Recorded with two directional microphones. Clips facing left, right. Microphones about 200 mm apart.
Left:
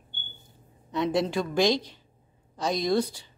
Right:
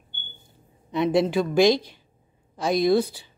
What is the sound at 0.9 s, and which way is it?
Speech, 15° right (ahead or behind).